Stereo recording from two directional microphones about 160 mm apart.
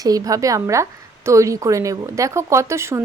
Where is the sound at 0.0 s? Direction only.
20° right (ahead or behind).